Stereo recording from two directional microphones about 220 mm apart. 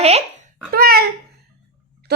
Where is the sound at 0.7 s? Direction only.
45° right (ahead or behind).